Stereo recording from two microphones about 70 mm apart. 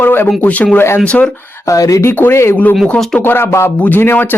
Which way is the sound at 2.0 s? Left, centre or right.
Left.